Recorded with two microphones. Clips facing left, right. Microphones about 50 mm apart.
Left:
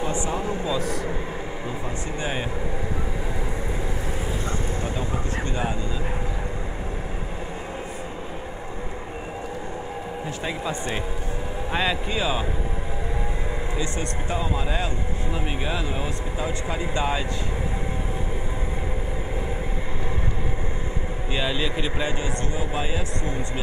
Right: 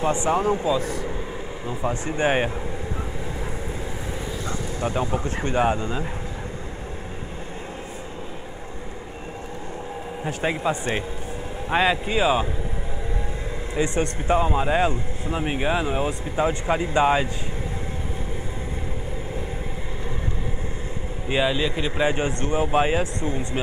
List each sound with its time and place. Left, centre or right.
0.0 s a man's voice: right
0.7 s speech: right
1.9 s a man's voice: right
5.1 s speech: right
10.2 s speech: right
13.7 s speech: right
21.5 s speech: centre
22.0 s a man's voice: right